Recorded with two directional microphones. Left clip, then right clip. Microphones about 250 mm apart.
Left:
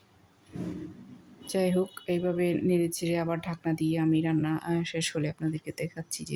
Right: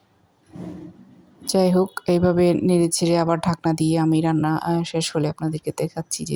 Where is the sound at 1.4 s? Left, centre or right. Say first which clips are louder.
Right 9 dB; centre.